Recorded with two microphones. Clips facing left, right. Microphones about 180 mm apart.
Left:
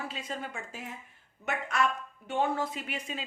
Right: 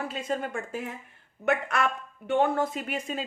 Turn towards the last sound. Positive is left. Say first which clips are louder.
# right 6 dB
turn(degrees=-45)  # may be behind; listen again after turning